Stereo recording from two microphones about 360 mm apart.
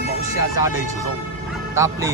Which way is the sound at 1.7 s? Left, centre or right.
Centre.